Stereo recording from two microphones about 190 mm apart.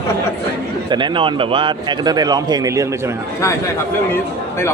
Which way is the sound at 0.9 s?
25° right (ahead or behind).